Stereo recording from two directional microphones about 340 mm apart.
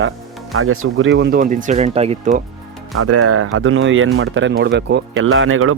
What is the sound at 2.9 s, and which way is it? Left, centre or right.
Speech, right.